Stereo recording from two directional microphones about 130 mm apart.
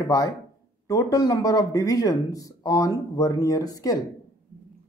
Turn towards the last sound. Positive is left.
turn(degrees=30)  # may be behind; listen again after turning